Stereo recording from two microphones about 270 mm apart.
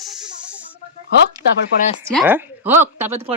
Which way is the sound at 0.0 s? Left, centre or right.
Centre.